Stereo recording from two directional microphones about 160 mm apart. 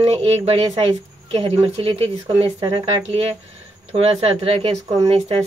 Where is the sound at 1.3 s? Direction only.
40° right (ahead or behind).